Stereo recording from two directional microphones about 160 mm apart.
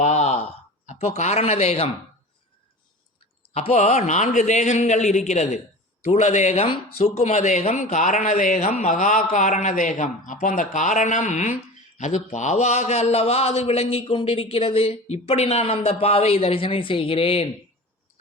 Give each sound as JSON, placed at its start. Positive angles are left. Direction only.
{"t": 0.0, "sound": "a sound", "side_deg": 45}
{"t": 0.9, "sound": "a man's voice", "side_deg": 45}
{"t": 3.5, "sound": "a man's voice", "side_deg": 40}